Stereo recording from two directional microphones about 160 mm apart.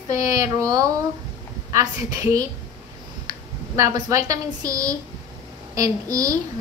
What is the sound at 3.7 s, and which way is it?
A woman's voice, 20° right (ahead or behind).